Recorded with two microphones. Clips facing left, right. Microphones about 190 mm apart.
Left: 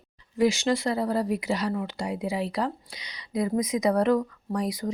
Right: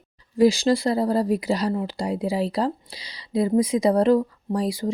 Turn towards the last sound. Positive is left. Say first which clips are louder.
# right 4 dB
turn(degrees=-30)  # may be behind; listen again after turning